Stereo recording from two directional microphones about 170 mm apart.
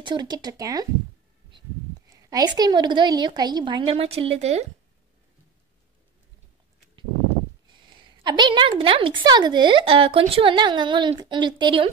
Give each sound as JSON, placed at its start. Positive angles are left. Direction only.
{"t": 0.0, "sound": "a woman's voice", "side_deg": -25}
{"t": 2.0, "sound": "a woman's voice", "side_deg": -20}
{"t": 8.2, "sound": "a woman's voice", "side_deg": -25}